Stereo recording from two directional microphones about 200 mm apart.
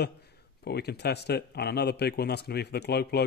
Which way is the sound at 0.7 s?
55° left (ahead or behind).